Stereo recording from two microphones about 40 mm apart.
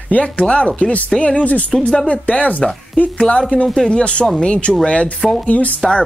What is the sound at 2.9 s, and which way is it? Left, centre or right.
Speech, left.